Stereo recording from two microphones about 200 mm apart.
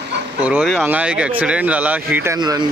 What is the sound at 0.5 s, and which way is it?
Speech, 5° right (ahead or behind).